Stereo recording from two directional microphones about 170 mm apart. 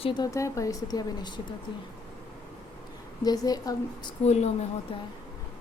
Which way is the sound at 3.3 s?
20° left (ahead or behind).